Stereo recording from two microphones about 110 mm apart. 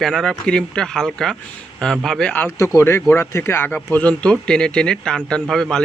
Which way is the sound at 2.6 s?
25° left (ahead or behind).